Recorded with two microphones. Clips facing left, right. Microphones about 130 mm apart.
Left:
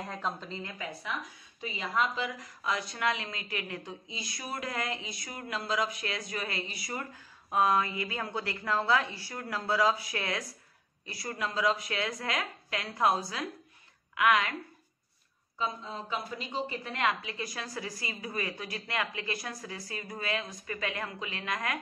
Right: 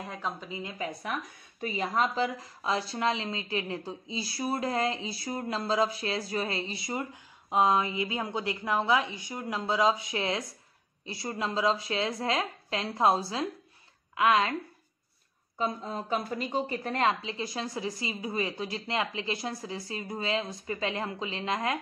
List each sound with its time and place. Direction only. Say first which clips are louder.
0.0 s a woman's voice: even; 5° right (ahead or behind)
1.6 s a woman's voice: right 3 dB; 45° right (ahead or behind); by 14.5 s 30° right (ahead or behind)
15.5 s a woman's voice: right 4 dB; 45° right (ahead or behind); by 21.7 s 25° right (ahead or behind)